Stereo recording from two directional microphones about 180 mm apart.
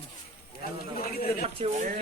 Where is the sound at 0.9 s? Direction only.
55° left (ahead or behind).